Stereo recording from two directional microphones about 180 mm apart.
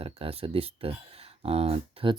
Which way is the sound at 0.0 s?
35° right (ahead or behind).